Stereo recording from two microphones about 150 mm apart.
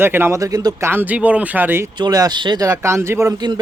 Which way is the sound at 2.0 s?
25° right (ahead or behind).